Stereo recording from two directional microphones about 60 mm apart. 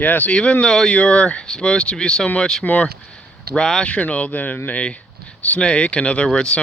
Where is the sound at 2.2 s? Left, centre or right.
Left.